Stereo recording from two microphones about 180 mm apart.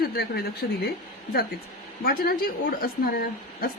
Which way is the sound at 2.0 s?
55° left (ahead or behind).